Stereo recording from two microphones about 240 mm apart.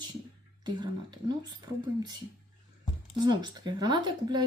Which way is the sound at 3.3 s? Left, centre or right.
Centre.